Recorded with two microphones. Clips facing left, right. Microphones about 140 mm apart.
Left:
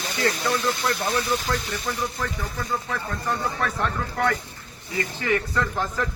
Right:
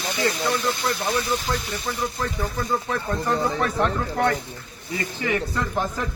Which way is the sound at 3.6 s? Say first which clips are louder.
Right 4 dB; 20° right (ahead or behind).